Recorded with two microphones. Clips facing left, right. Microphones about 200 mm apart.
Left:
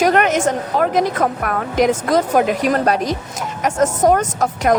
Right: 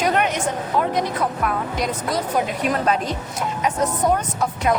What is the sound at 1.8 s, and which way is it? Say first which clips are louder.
Speech: left 12 dB; 90° left.